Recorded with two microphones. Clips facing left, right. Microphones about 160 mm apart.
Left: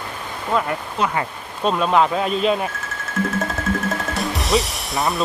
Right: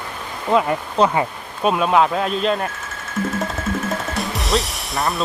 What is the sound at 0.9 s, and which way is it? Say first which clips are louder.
Speech: right 6 dB; 30° right (ahead or behind).